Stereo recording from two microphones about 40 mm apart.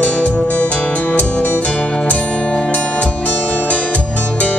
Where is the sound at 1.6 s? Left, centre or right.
Left.